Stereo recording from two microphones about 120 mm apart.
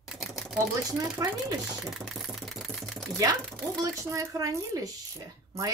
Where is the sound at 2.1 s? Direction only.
Centre (ahead or behind).